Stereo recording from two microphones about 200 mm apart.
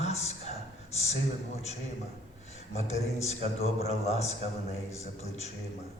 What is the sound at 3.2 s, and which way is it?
A man's voice, 30° left (ahead or behind).